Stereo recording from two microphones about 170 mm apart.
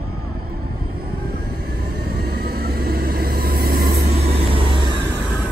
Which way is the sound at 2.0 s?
65° right (ahead or behind).